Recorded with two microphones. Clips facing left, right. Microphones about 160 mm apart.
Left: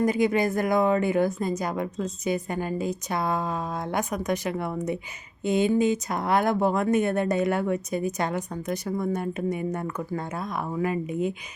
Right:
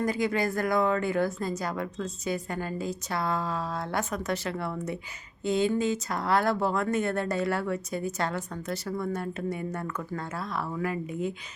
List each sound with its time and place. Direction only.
0.0 s speech: 20° left (ahead or behind)